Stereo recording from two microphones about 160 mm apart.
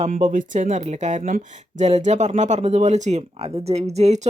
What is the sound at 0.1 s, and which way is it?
Speech, 55° right (ahead or behind).